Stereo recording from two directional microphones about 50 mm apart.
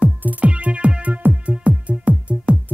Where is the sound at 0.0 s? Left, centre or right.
Right.